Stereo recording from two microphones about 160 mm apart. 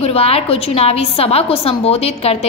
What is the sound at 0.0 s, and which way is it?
A woman's voice, 35° left (ahead or behind).